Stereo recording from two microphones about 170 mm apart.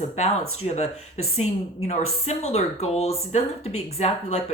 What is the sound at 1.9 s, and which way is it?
Speech, 40° left (ahead or behind).